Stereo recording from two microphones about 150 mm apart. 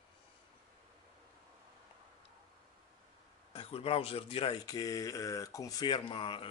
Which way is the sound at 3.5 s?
40° left (ahead or behind).